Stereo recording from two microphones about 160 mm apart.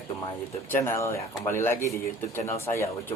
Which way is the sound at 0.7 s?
15° left (ahead or behind).